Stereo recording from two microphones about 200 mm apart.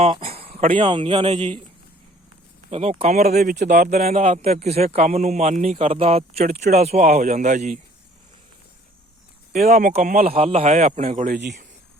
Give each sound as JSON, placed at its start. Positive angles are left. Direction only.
{"t": 0.3, "sound": "a sound", "side_deg": -30}
{"t": 0.8, "sound": "speech", "side_deg": -25}
{"t": 2.6, "sound": "speech", "side_deg": -30}
{"t": 3.5, "sound": "speech", "side_deg": -50}
{"t": 9.5, "sound": "speech", "side_deg": -35}
{"t": 10.2, "sound": "speech", "side_deg": -30}